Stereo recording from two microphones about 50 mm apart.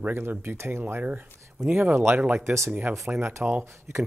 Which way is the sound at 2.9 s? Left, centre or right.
Right.